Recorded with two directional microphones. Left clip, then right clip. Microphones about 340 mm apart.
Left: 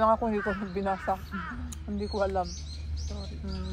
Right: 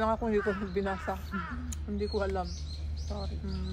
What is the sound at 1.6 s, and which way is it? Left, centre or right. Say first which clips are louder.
Speech: right 1 dB; centre.